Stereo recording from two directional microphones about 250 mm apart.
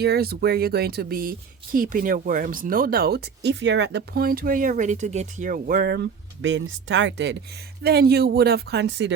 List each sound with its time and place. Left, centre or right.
0.0 s speech: right